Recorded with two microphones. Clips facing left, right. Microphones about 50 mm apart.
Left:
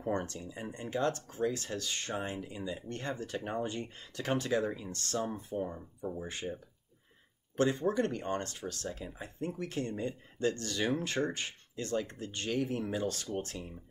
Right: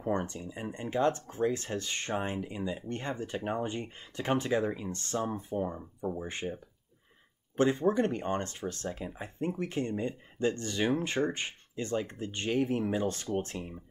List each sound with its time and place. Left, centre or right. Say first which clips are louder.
0.1 s speech: right 3 dB; right
7.5 s speech: right 3 dB; right